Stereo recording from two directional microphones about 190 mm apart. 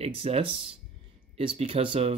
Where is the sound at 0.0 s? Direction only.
30° right (ahead or behind).